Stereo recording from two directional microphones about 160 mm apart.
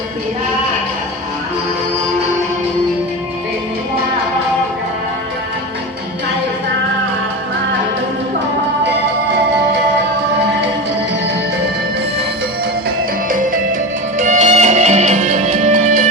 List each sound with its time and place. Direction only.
13.2 s music: 60° right (ahead or behind)
14.2 s music: 45° right (ahead or behind)